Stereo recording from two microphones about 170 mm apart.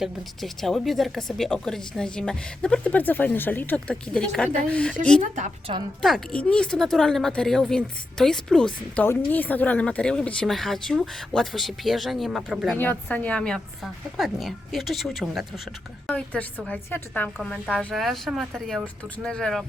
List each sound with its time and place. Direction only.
0.0 s speech: centre (ahead or behind)
6.0 s speech: centre (ahead or behind)
12.7 s a woman's voice: 10° left (ahead or behind)